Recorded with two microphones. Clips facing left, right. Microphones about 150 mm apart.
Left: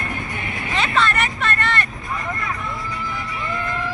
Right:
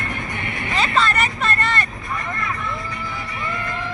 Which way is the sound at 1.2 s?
40° right (ahead or behind).